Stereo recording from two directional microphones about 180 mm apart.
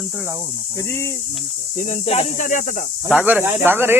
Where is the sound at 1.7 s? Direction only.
40° left (ahead or behind).